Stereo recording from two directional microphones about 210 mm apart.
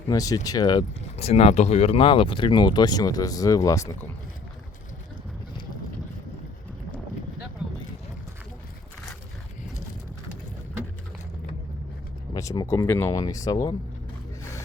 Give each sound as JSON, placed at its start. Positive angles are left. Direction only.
{"t": 0.1, "sound": "speech", "side_deg": 15}
{"t": 7.6, "sound": "a sound", "side_deg": 0}
{"t": 12.3, "sound": "speech", "side_deg": 15}